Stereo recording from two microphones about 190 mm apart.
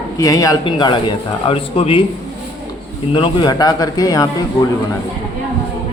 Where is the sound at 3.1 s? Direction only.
25° left (ahead or behind).